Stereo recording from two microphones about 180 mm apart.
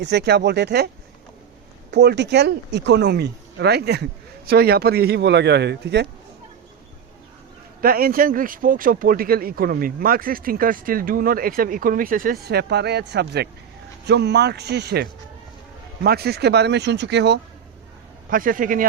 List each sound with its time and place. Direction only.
0.0 s speech: 70° right (ahead or behind)
1.9 s speech: 65° right (ahead or behind)
7.8 s speech: 55° right (ahead or behind)
16.0 s speech: 60° right (ahead or behind)
18.3 s speech: 50° right (ahead or behind)